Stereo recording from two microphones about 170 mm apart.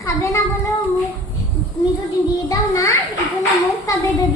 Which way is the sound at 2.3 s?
20° left (ahead or behind).